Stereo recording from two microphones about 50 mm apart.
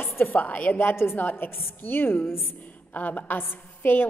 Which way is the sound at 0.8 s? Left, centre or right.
Left.